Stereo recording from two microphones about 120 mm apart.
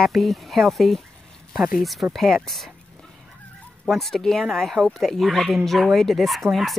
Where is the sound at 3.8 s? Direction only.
Centre (ahead or behind).